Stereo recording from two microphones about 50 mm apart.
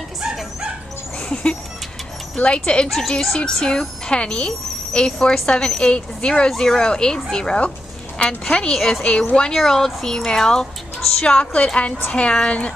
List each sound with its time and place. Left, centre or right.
1.3 s a woman's voice: centre
2.9 s a woman's voice: centre
4.1 s a woman's voice: centre
6.5 s a woman's voice: centre
9.5 s a woman's voice: centre
11.3 s a woman's voice: left